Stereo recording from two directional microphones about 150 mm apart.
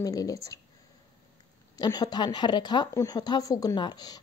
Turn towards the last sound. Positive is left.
turn(degrees=25)  # may be behind; listen again after turning